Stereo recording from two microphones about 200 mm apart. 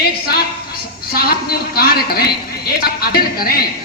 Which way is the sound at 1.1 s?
50° left (ahead or behind).